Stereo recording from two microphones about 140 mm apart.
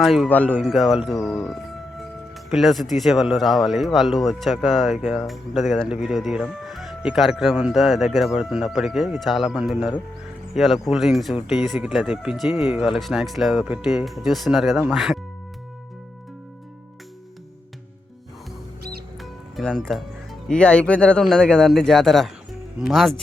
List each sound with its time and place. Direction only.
0.0 s speech: centre (ahead or behind)
0.3 s speech: 10° left (ahead or behind)
0.6 s speech: centre (ahead or behind)
19.2 s music: centre (ahead or behind)
20.5 s speech: 10° left (ahead or behind)